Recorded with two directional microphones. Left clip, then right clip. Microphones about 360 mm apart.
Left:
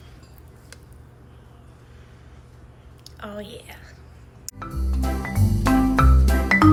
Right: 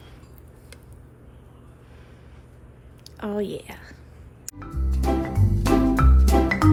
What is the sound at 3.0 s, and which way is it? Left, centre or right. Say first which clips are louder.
Whispering: right 7 dB; centre.